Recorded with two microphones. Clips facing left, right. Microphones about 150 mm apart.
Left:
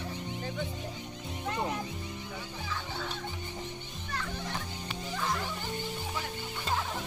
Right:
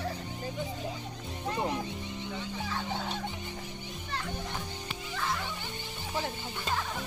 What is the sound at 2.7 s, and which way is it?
Music, 45° right (ahead or behind).